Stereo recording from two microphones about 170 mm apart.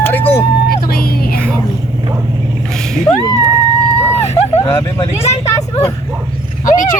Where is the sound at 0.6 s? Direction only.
60° left (ahead or behind).